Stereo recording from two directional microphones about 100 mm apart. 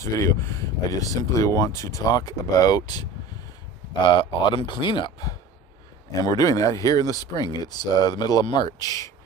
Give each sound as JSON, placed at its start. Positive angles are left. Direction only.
{"t": 0.0, "sound": "speech", "side_deg": 30}
{"t": 6.2, "sound": "speech", "side_deg": 35}